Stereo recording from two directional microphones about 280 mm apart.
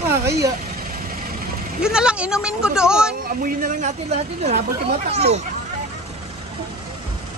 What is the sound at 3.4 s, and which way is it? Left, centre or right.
Speech, right.